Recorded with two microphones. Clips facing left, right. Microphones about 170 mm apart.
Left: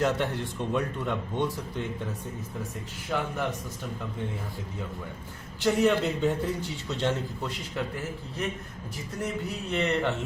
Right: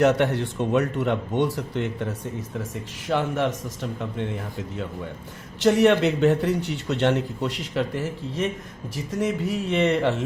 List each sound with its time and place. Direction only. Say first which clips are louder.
0.0 s speech: right 7 dB; 75° right (ahead or behind)
3.1 s a man's voice: right 7 dB; 80° right
5.5 s a man's voice: right 6 dB; 80° right